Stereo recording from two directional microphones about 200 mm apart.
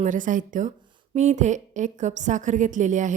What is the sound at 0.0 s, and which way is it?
A woman's voice, 40° right (ahead or behind).